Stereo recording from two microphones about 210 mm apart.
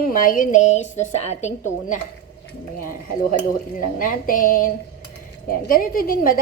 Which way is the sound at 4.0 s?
40° left (ahead or behind).